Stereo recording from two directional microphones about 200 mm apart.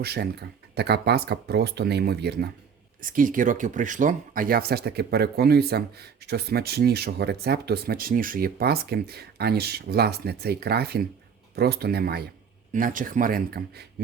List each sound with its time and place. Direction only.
0.0 s speech: 50° right (ahead or behind)
3.0 s speech: 40° right (ahead or behind)